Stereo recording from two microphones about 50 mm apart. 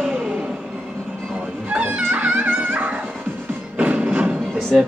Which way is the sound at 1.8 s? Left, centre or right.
Right.